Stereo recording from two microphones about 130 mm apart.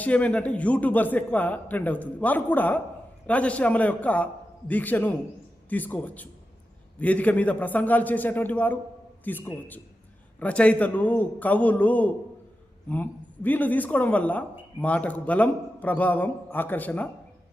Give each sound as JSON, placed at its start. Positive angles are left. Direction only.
{"t": 0.0, "sound": "a man's voice", "side_deg": 10}